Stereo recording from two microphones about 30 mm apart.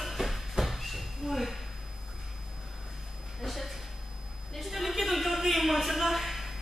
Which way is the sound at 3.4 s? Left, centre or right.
Centre.